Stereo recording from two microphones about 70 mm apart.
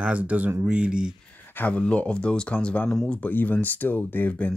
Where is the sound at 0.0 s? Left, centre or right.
Centre.